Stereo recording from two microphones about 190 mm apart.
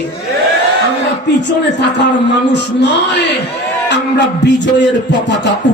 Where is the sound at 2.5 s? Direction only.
65° left (ahead or behind).